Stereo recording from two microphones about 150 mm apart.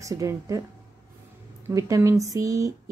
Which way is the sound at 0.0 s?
20° right (ahead or behind).